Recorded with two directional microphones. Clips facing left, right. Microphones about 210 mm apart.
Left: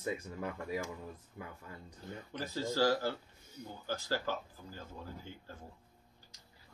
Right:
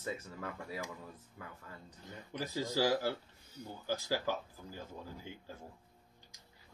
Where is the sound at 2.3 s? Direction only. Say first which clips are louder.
Even; 15° right (ahead or behind).